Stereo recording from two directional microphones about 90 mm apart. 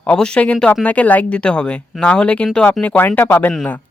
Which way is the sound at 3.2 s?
30° left (ahead or behind).